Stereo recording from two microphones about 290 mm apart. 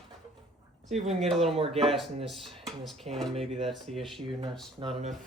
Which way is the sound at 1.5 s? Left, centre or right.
Centre.